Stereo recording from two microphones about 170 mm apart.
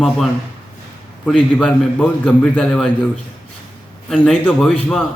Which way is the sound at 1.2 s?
5° left (ahead or behind).